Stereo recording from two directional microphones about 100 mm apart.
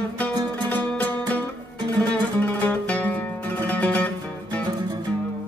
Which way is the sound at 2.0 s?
15° left (ahead or behind).